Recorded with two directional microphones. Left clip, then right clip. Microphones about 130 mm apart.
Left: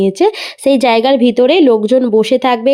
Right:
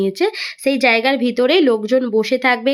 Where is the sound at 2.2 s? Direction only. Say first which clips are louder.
Left 5 dB; 40° left (ahead or behind).